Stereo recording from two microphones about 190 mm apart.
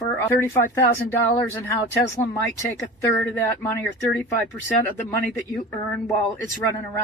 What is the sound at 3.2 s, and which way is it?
Speech, 10° left (ahead or behind).